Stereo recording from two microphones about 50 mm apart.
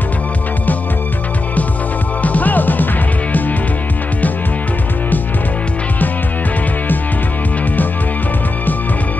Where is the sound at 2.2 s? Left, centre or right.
Left.